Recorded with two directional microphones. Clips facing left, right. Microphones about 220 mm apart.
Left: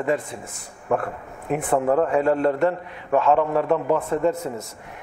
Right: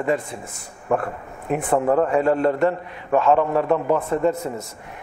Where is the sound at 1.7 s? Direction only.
25° right (ahead or behind).